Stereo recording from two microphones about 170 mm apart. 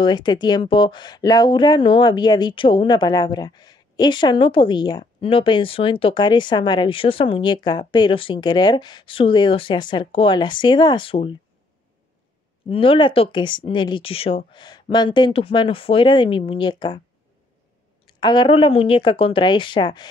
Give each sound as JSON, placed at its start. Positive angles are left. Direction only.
{"t": 0.0, "sound": "speech", "side_deg": 25}
{"t": 12.6, "sound": "speech", "side_deg": 35}
{"t": 18.0, "sound": "speech", "side_deg": 30}